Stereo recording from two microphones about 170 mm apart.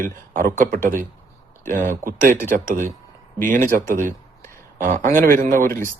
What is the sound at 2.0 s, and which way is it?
Speech, 50° right (ahead or behind).